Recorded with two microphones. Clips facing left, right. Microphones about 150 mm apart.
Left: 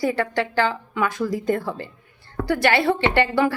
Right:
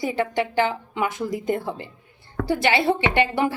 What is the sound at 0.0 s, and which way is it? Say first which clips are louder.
A woman's voice: left 1 dB; 20° right (ahead or behind).